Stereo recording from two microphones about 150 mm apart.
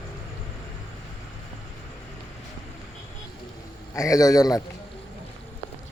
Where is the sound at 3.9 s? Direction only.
20° left (ahead or behind).